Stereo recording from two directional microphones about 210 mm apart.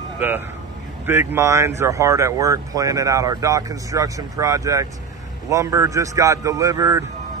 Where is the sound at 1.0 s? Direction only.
10° right (ahead or behind).